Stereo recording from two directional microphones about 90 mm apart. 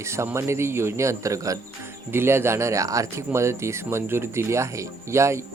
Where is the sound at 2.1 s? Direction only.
25° right (ahead or behind).